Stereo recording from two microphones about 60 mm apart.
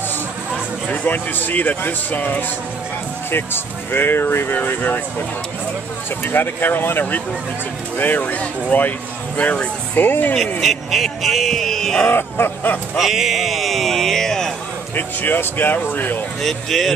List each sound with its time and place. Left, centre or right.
0.8 s speech: left
3.3 s speech: left
4.6 s speech: left
6.2 s speech: left
8.2 s speech: left
10.6 s speech: centre
12.1 s speech: left
12.9 s speech: centre
15.0 s speech: left
16.4 s speech: centre